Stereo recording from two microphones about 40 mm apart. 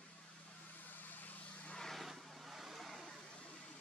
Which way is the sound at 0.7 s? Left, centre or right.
Left.